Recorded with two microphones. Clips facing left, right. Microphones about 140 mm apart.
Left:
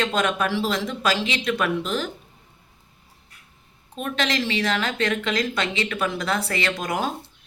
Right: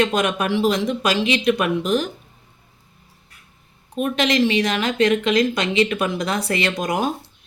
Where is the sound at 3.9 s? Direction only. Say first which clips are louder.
Right 6 dB; 15° right (ahead or behind).